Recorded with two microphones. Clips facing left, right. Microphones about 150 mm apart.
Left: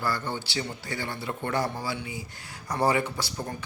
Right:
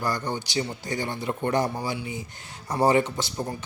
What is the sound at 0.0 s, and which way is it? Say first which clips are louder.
Speech: right 2 dB; 15° right (ahead or behind).